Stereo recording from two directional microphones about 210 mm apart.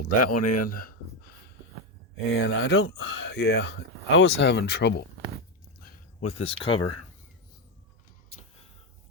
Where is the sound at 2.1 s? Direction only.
55° left (ahead or behind).